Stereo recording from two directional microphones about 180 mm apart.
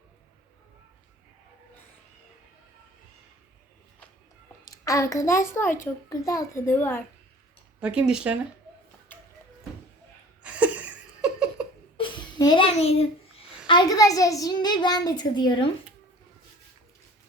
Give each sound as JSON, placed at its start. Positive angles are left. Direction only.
{"t": 4.6, "sound": "a child's voice", "side_deg": 15}
{"t": 7.8, "sound": "speech", "side_deg": -5}
{"t": 9.1, "sound": "music", "side_deg": 10}
{"t": 10.4, "sound": "laughter", "side_deg": -5}
{"t": 11.9, "sound": "a sound", "side_deg": 25}
{"t": 13.7, "sound": "a child's voice", "side_deg": 25}